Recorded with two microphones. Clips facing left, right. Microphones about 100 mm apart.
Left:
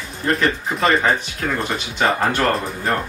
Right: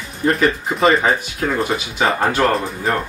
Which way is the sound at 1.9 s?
5° right (ahead or behind).